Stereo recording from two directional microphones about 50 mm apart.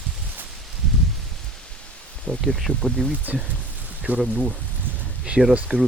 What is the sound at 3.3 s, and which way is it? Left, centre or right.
Speech, right.